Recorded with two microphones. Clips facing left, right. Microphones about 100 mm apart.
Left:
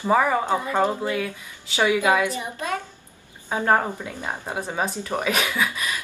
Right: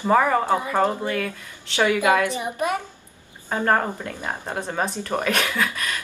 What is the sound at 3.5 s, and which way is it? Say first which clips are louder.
Speech: even; 5° left (ahead or behind).